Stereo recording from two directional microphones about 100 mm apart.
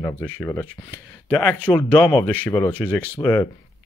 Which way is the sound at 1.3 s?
15° left (ahead or behind).